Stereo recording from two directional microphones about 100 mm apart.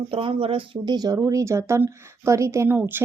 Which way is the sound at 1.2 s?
30° right (ahead or behind).